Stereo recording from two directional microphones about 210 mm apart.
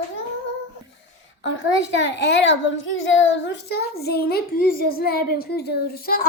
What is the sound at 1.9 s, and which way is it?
A child's voice, 55° left (ahead or behind).